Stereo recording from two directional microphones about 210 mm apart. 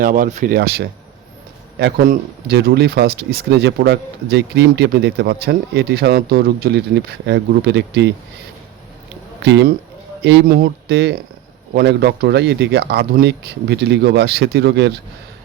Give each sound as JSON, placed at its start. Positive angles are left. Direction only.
{"t": 0.0, "sound": "speech", "side_deg": -40}
{"t": 0.5, "sound": "speech", "side_deg": -50}
{"t": 9.4, "sound": "speech", "side_deg": -55}